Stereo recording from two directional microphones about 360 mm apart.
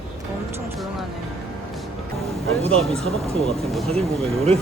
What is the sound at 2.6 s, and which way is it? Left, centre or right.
Speech, centre.